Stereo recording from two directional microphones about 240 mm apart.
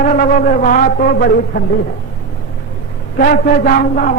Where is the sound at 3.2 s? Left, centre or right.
Left.